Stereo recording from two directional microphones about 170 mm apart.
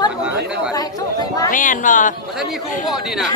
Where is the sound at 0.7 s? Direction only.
20° left (ahead or behind).